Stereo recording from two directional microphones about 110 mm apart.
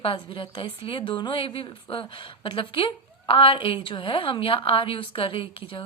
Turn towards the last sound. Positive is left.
turn(degrees=50)  # may be behind; listen again after turning